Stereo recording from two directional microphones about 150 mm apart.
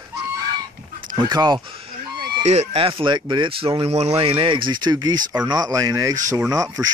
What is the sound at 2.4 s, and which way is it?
Speech, 45° right (ahead or behind).